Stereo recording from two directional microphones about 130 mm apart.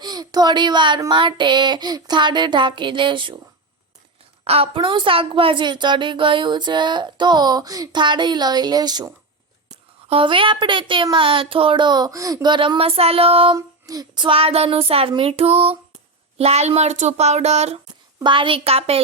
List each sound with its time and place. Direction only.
0.0 s a woman's voice: 30° right (ahead or behind)
4.4 s a woman's voice: 50° right (ahead or behind); by 9.0 s 30° right (ahead or behind)
9.6 s a woman's voice: 45° right (ahead or behind)
13.6 s female singing: 30° right (ahead or behind)
14.3 s child singing: 45° right (ahead or behind)
16.4 s a child's voice: 55° right (ahead or behind)
18.2 s child singing: 40° right (ahead or behind)